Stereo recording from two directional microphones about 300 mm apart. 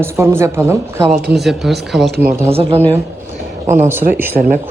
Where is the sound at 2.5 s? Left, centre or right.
Centre.